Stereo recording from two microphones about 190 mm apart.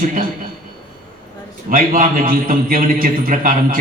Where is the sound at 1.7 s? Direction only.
45° right (ahead or behind).